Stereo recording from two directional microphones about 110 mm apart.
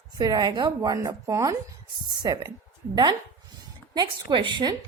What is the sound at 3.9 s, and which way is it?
Speech, 40° right (ahead or behind).